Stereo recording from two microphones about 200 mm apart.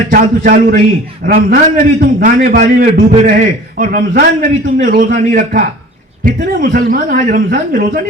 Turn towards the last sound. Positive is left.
turn(degrees=-45)  # may be behind; listen again after turning